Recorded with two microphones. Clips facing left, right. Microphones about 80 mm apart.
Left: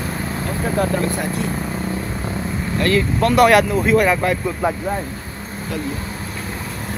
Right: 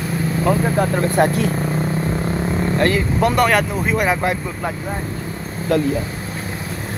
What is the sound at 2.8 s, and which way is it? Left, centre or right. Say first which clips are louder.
Speech: left 1 dB; centre.